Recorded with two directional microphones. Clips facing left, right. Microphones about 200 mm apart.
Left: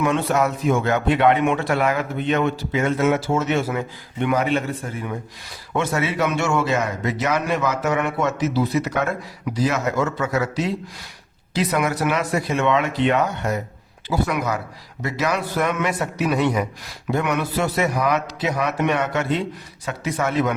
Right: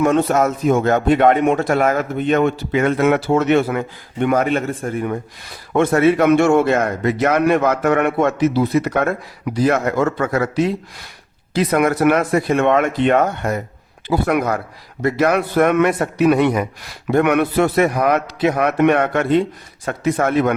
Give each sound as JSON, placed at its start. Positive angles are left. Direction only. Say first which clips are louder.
{"t": 0.0, "sound": "a man's voice", "louder": "right 5 dB", "side_deg": -45}